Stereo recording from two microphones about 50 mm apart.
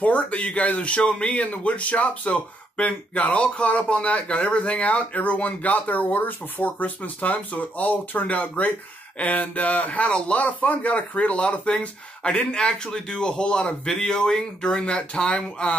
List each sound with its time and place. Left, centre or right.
0.0 s speech: left